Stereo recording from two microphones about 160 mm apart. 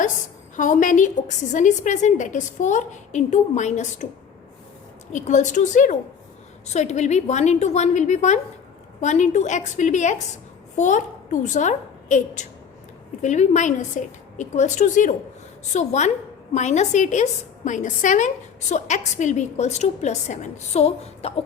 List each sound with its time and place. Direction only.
0.5 s a woman's voice: 50° left (ahead or behind)
5.1 s a woman's voice: 50° left (ahead or behind)